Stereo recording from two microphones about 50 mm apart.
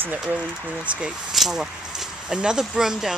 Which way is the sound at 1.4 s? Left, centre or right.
Centre.